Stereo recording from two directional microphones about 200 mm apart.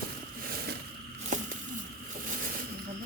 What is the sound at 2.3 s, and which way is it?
Vehicle, 45° right (ahead or behind).